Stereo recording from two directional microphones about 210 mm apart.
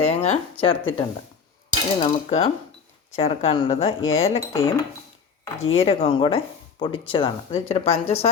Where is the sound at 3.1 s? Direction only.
25° left (ahead or behind).